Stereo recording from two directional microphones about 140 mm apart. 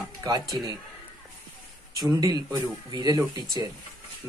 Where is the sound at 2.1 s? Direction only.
25° right (ahead or behind).